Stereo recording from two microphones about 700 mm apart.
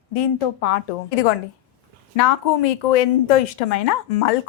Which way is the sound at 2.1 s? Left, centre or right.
Left.